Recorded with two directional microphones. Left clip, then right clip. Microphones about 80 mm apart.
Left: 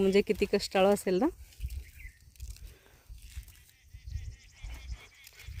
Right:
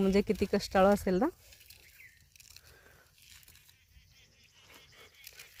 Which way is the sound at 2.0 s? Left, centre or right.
Right.